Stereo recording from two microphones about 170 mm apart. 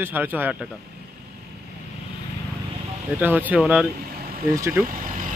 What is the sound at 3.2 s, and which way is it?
Speech, 10° right (ahead or behind).